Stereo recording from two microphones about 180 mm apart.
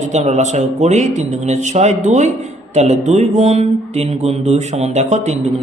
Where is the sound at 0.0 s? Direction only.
40° right (ahead or behind).